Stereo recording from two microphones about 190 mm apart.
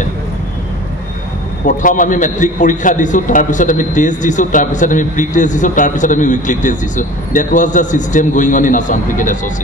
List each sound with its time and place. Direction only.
1.7 s a man's voice: 45° left (ahead or behind)